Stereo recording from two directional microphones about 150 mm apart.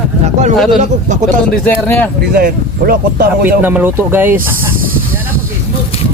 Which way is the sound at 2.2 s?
90° right.